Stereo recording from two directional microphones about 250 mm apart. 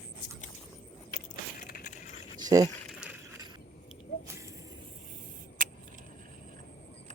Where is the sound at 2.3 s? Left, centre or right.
Centre.